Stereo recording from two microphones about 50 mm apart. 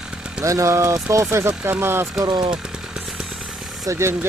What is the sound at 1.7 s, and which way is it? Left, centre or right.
Speech, right.